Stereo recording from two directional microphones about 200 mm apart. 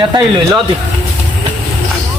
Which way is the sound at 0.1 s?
20° right (ahead or behind).